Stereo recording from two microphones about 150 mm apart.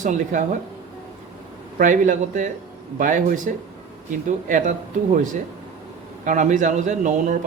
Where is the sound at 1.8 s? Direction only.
60° right (ahead or behind).